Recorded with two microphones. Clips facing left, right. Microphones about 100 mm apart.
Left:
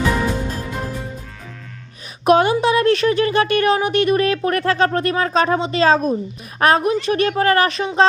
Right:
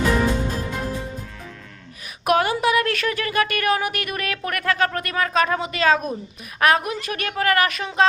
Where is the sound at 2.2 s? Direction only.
25° left (ahead or behind).